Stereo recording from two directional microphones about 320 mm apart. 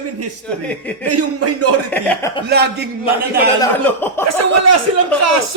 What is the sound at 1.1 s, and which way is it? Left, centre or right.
Speech, right.